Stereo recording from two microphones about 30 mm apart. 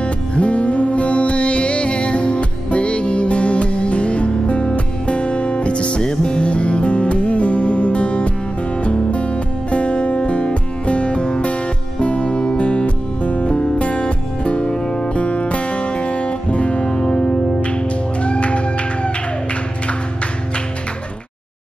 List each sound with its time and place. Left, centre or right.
0.0 s music: left
14.8 s music: left
15.1 s music: left